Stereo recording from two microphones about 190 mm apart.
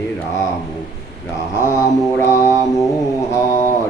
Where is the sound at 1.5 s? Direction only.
15° left (ahead or behind).